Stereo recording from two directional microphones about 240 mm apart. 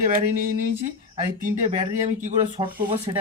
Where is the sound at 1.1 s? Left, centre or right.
Right.